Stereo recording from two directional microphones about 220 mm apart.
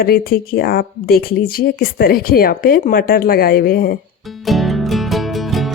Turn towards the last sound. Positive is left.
turn(degrees=0)  # may be behind; listen again after turning